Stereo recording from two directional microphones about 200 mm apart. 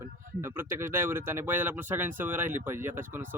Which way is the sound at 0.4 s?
10° right (ahead or behind).